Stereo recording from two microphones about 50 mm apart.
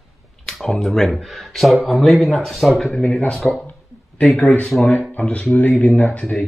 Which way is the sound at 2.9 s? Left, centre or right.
Left.